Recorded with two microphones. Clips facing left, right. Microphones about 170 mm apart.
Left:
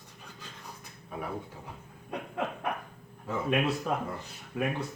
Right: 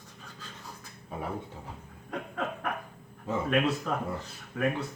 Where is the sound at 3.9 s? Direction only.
15° left (ahead or behind).